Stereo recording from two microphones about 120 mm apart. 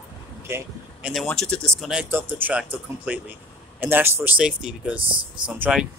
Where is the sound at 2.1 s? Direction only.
15° right (ahead or behind).